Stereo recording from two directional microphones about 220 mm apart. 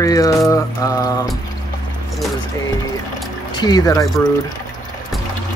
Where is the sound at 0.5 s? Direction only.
15° left (ahead or behind).